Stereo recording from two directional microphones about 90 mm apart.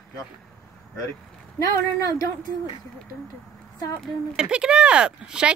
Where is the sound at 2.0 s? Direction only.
45° left (ahead or behind).